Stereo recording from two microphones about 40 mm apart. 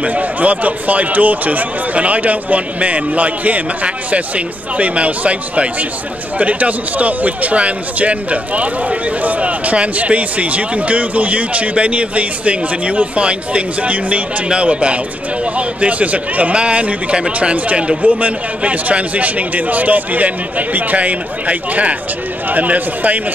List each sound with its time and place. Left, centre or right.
0.0 s a man's voice: right
18.0 s speech: right